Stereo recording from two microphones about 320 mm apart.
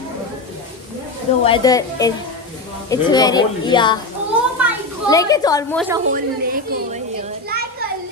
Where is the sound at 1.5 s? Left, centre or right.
Centre.